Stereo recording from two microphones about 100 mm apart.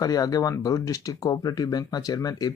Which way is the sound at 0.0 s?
40° left (ahead or behind).